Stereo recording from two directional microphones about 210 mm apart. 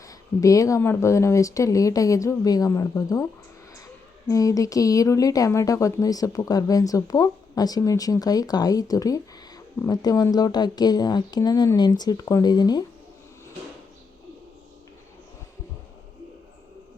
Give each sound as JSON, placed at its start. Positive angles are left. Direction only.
{"t": 0.0, "sound": "speech", "side_deg": 15}
{"t": 4.3, "sound": "speech", "side_deg": 15}